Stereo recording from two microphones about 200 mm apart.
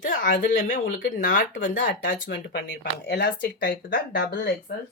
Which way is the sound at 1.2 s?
65° left (ahead or behind).